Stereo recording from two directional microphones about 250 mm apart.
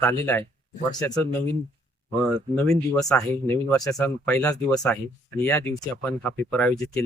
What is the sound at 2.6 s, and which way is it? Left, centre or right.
Speech, centre.